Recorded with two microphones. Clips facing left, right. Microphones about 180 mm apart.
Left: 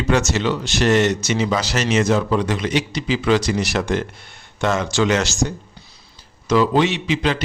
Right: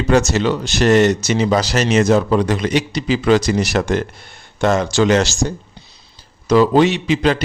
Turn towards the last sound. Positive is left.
turn(degrees=-40)  # may be behind; listen again after turning